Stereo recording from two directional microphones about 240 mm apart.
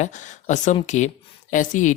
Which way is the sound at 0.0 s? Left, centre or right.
Left.